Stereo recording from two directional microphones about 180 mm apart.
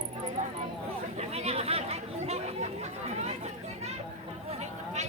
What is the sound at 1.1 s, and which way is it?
Chatter, 35° right (ahead or behind).